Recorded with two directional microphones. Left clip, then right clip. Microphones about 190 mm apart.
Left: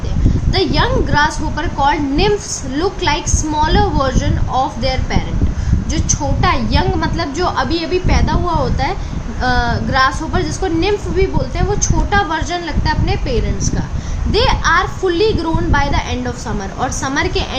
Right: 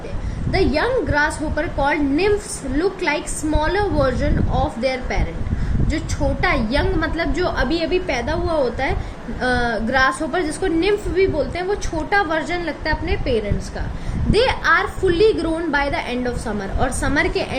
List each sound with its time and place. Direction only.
0.5 s a woman's voice: 5° right (ahead or behind)
9.4 s a woman's voice: 10° right (ahead or behind)
12.3 s a woman's voice: 5° right (ahead or behind)
14.3 s a woman's voice: 10° right (ahead or behind)